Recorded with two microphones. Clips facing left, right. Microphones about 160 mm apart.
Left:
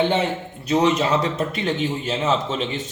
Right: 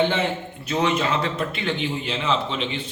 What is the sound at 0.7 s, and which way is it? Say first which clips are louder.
A man's voice: left 4 dB; 35° left (ahead or behind).